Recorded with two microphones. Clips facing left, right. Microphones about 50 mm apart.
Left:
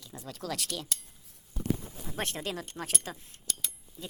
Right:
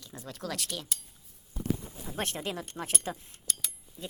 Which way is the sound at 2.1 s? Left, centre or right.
Right.